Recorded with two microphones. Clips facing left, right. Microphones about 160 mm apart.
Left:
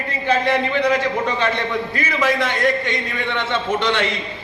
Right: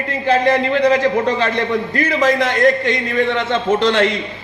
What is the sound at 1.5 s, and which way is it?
A man's voice, 50° right (ahead or behind).